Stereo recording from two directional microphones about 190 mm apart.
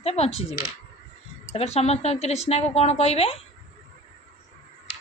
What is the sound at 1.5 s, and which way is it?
Speech, 35° left (ahead or behind).